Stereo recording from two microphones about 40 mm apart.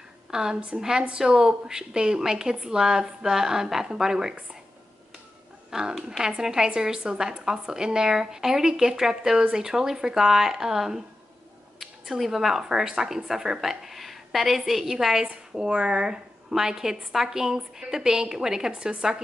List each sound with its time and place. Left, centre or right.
0.3 s a woman's voice: centre
5.7 s a woman's voice: centre
15.5 s a woman's voice: right